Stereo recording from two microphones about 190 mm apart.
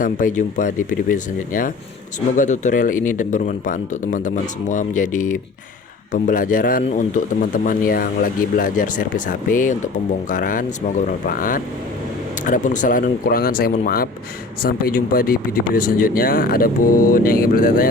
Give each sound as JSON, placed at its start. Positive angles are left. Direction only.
{"t": 0.0, "sound": "speech", "side_deg": 45}